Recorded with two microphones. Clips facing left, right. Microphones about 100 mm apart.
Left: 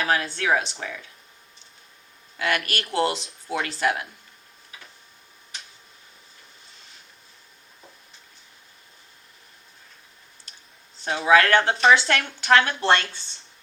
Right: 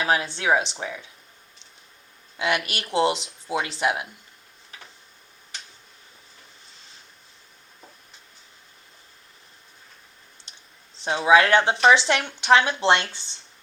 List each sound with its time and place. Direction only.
0.0 s speech: 20° right (ahead or behind)
2.4 s speech: 15° right (ahead or behind)
11.0 s speech: 20° right (ahead or behind)